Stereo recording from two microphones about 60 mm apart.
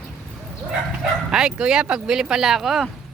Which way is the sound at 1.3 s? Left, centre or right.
Centre.